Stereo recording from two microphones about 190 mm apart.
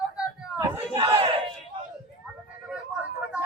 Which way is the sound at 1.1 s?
35° right (ahead or behind).